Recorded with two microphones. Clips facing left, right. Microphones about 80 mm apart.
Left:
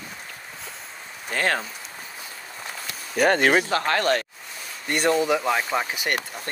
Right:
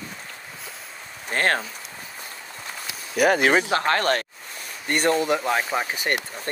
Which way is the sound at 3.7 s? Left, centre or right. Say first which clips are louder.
Even; right.